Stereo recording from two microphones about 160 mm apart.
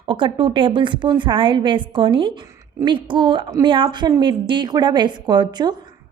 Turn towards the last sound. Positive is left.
turn(degrees=-25)  # may be behind; listen again after turning